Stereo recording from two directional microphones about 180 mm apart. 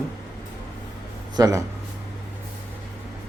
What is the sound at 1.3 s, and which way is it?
Speech, 20° right (ahead or behind).